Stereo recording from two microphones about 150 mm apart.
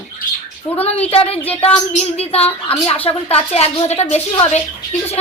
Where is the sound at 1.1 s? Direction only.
40° left (ahead or behind).